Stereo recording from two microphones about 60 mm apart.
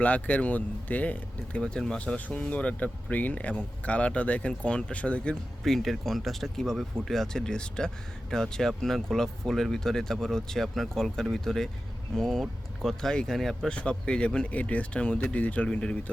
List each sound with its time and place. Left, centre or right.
0.0 s speech: left
5.6 s speech: centre
13.7 s speech: centre